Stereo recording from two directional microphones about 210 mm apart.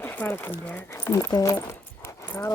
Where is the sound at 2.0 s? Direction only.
15° left (ahead or behind).